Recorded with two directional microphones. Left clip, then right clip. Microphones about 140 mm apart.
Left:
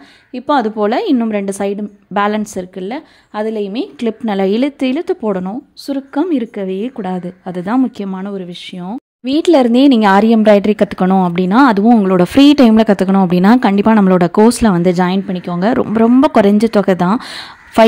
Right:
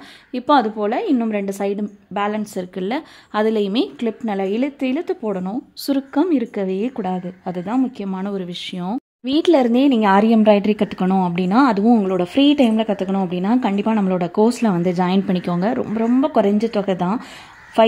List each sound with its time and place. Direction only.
0.5 s a woman's voice: 20° left (ahead or behind)
2.7 s a woman's voice: 5° left (ahead or behind)
4.0 s a woman's voice: 30° left (ahead or behind)
5.8 s a woman's voice: centre (ahead or behind)
6.1 s a woman's voice: 15° left (ahead or behind)
7.1 s a woman's voice: 25° left (ahead or behind)
8.1 s a woman's voice: 15° left (ahead or behind)
9.4 s a woman's voice: 20° left (ahead or behind)
15.2 s a woman's voice: 10° left (ahead or behind)
15.6 s a woman's voice: 35° left (ahead or behind)